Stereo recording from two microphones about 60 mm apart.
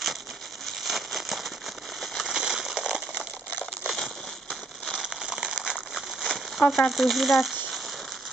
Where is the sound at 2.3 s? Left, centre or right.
Centre.